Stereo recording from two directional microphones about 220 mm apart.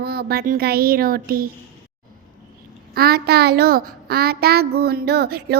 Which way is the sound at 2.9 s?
45° right (ahead or behind).